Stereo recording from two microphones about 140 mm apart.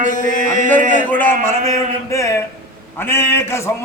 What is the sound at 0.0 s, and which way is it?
Mantra, 65° left (ahead or behind).